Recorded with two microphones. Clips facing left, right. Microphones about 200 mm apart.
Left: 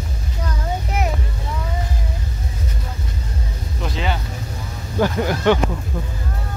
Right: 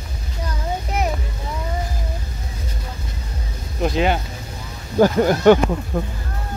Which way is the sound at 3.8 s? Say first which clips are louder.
Right 7 dB; 50° right (ahead or behind).